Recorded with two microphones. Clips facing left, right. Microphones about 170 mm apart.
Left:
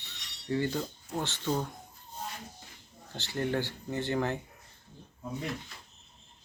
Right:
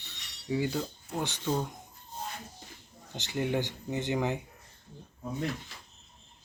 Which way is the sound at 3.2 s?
15° right (ahead or behind).